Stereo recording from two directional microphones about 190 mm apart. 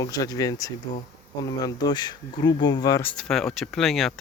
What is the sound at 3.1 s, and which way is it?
Speech, 5° left (ahead or behind).